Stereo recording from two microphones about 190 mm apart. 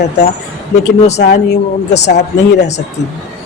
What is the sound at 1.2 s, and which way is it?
Speech, 65° left (ahead or behind).